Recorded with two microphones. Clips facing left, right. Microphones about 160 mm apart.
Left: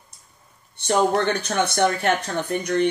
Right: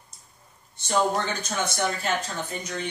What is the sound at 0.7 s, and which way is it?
Speech, 65° left (ahead or behind).